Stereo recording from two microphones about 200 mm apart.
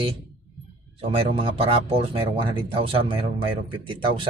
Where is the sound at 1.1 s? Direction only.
25° right (ahead or behind).